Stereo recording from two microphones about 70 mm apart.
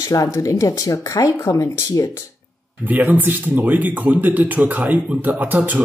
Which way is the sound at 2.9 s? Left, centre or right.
Right.